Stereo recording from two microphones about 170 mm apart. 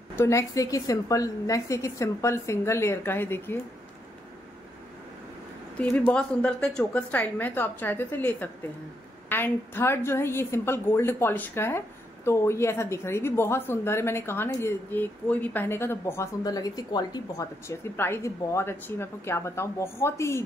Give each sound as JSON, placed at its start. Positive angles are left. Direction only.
{"t": 0.1, "sound": "a woman's voice", "side_deg": 15}
{"t": 5.8, "sound": "a woman's voice", "side_deg": 10}